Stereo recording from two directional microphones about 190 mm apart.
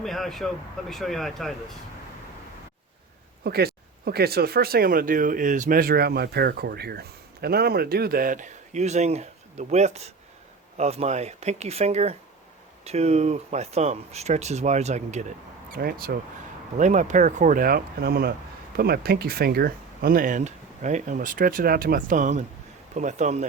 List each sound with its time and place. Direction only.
0.0 s speech: centre (ahead or behind)
3.4 s speech: 55° right (ahead or behind); by 15.3 s 35° right (ahead or behind)
15.7 s speech: 50° right (ahead or behind)
16.7 s speech: 40° right (ahead or behind)